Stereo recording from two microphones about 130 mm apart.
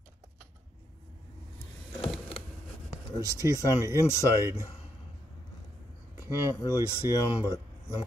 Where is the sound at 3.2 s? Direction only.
25° right (ahead or behind).